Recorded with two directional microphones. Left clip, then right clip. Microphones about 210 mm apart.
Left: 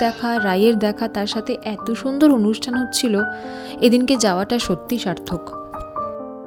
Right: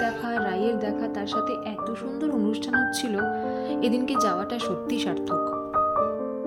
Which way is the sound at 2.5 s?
30° left (ahead or behind).